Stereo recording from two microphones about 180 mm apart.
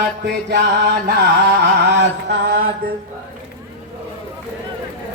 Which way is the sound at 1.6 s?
70° right (ahead or behind).